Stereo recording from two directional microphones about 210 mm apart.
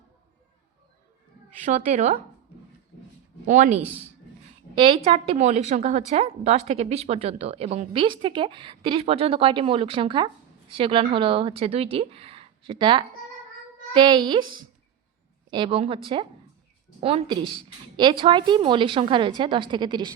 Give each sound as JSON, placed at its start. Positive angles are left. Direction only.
{"t": 1.6, "sound": "speech", "side_deg": -35}
{"t": 3.4, "sound": "speech", "side_deg": -35}
{"t": 4.8, "sound": "a woman's voice", "side_deg": -25}